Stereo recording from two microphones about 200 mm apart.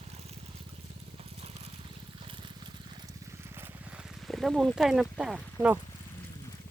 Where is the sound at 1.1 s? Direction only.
30° right (ahead or behind).